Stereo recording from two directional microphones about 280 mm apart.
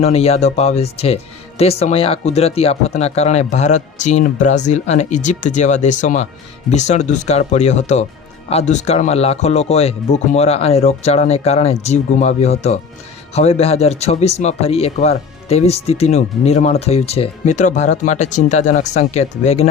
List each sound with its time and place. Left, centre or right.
0.0 s speech: left